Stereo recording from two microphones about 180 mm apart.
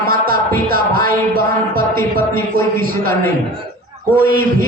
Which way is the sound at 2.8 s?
55° right (ahead or behind).